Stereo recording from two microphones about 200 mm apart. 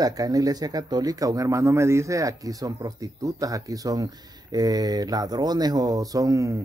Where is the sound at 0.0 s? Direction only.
20° right (ahead or behind).